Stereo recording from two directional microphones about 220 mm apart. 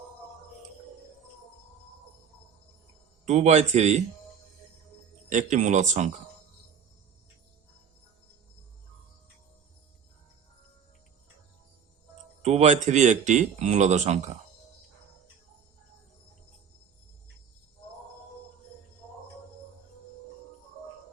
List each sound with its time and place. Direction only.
3.2 s speech: 30° right (ahead or behind)
5.3 s speech: 35° right (ahead or behind)
12.4 s speech: 30° right (ahead or behind)